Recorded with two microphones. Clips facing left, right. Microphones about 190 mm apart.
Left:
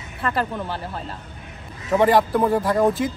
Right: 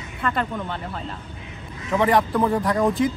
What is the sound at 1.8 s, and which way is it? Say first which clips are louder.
Speech: left 3 dB; 30° left (ahead or behind).